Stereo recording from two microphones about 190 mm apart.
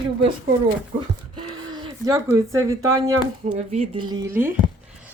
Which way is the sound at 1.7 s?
25° right (ahead or behind).